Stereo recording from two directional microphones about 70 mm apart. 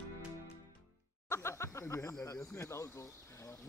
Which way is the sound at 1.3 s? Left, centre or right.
Left.